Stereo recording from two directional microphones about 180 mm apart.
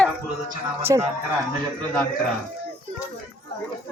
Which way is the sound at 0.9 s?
20° right (ahead or behind).